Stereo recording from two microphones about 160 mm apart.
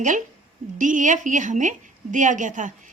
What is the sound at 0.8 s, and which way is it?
A woman's voice, 50° right (ahead or behind).